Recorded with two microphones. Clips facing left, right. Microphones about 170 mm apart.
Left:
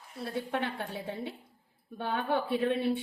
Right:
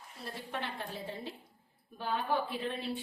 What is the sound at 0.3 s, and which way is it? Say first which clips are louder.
Speech: left 7 dB; 65° left (ahead or behind).